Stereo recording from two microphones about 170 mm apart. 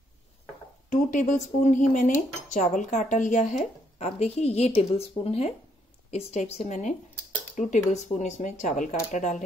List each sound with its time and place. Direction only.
0.8 s speech: 45° left (ahead or behind)